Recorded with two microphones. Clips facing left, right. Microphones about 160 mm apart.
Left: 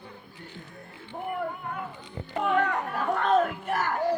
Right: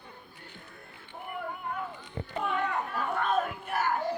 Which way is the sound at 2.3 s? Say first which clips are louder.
Left 6 dB; 55° left (ahead or behind).